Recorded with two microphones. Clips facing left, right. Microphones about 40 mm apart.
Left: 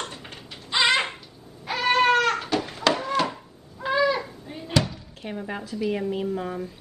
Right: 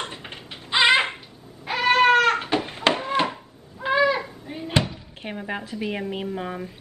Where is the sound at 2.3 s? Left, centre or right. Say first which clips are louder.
Right 2 dB; right.